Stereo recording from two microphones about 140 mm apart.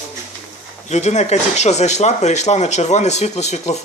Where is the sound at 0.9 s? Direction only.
55° left (ahead or behind).